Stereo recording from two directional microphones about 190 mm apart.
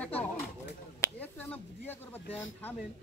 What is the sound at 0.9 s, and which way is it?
Finger snapping, 10° left (ahead or behind).